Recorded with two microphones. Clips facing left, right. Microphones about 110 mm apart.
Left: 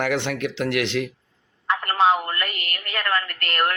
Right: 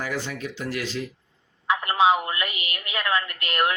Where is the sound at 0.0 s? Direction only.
70° left (ahead or behind).